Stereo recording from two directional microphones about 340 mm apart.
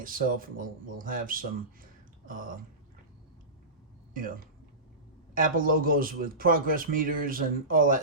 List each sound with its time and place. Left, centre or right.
0.0 s speech: right
4.1 s speech: right
5.4 s speech: right